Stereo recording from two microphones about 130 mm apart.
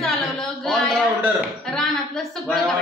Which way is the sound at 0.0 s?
5° left (ahead or behind).